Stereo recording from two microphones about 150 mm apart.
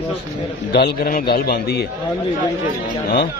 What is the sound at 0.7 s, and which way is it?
A man's voice, 90° left.